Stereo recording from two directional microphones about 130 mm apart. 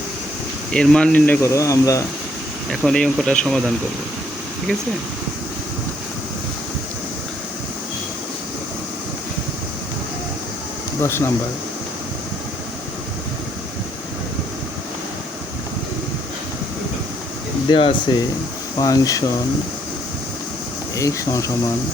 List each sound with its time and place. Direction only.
0.7 s speech: 5° left (ahead or behind)
1.4 s speech: 25° left (ahead or behind)
2.6 s speech: 5° left (ahead or behind)
11.0 s speech: 20° left (ahead or behind)
17.7 s speech: 45° left (ahead or behind)
18.8 s speech: 25° left (ahead or behind)
20.9 s speech: 25° left (ahead or behind)